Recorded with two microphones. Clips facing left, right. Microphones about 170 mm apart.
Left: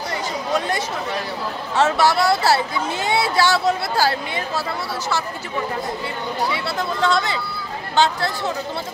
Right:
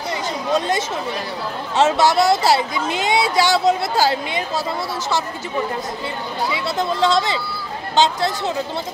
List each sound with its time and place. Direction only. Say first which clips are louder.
1.8 s speech: right 2 dB; 20° right (ahead or behind)
6.5 s speech: right 3 dB; 20° right (ahead or behind)